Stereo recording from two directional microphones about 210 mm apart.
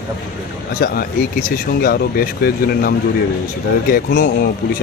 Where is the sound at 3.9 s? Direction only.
45° left (ahead or behind).